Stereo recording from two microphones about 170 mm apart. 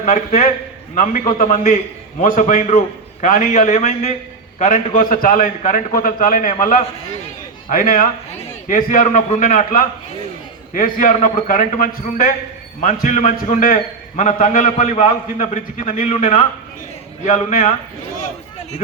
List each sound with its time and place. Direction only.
0.0 s a man's voice: 50° left (ahead or behind)